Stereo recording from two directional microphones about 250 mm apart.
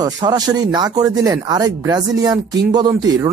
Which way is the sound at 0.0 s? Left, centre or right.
Centre.